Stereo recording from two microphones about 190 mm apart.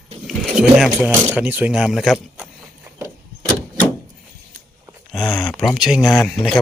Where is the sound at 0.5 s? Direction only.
5° right (ahead or behind).